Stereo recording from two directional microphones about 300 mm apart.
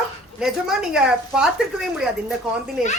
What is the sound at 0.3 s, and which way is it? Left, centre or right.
A woman's voice, centre.